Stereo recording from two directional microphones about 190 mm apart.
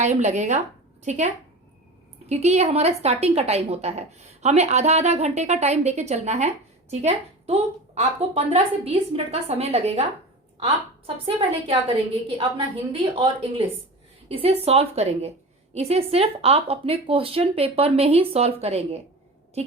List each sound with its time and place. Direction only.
0.0 s a woman's voice: 40° right (ahead or behind)
2.3 s a woman's voice: 35° right (ahead or behind)